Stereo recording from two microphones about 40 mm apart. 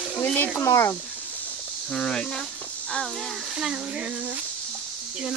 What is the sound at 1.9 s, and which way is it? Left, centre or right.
Speech, centre.